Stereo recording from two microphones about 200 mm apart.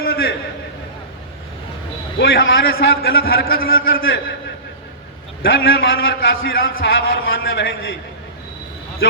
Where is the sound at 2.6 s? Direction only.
50° left (ahead or behind).